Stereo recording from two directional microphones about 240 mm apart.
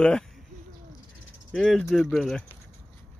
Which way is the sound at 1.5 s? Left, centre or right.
Centre.